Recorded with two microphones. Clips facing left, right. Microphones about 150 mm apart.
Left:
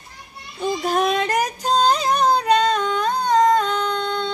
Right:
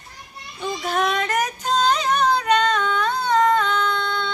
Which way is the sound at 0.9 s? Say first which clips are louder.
Left 2 dB; 35° left (ahead or behind).